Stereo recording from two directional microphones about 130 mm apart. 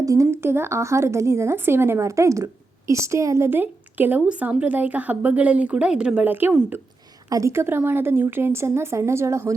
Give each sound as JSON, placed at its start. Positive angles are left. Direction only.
{"t": 0.0, "sound": "speech", "side_deg": -25}